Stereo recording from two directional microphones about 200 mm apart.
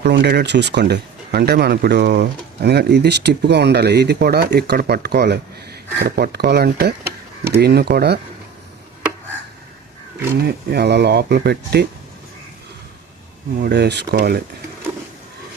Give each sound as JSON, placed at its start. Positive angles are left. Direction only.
{"t": 0.0, "sound": "speech", "side_deg": -55}
{"t": 10.3, "sound": "speech", "side_deg": -50}
{"t": 13.6, "sound": "speech", "side_deg": -55}